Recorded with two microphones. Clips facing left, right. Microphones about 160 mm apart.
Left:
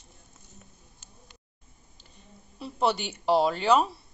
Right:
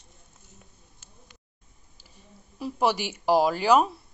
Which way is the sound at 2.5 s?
10° right (ahead or behind).